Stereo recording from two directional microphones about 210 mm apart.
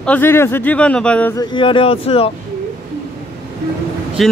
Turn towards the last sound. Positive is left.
turn(degrees=0)  # may be behind; listen again after turning